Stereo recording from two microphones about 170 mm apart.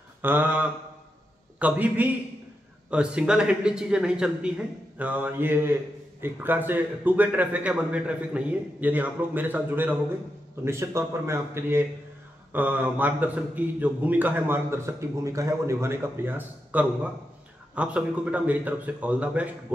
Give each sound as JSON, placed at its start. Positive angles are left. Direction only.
{"t": 0.2, "sound": "a man's voice", "side_deg": -10}